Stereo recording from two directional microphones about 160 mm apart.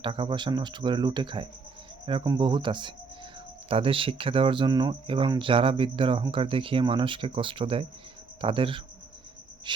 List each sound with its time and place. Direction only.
0.0 s speech: 30° right (ahead or behind)
9.7 s cricket: 30° right (ahead or behind)